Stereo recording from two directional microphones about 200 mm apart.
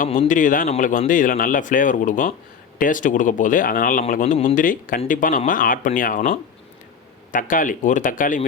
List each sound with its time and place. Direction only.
0.0 s speech: 40° left (ahead or behind)